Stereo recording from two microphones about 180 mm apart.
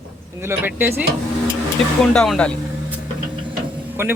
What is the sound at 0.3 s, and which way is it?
Speech, 10° right (ahead or behind).